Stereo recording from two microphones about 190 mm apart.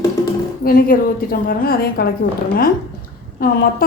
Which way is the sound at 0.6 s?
50° left (ahead or behind).